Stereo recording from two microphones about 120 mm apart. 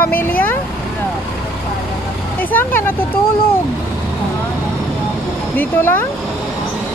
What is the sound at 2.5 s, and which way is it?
Vehicle, 15° left (ahead or behind).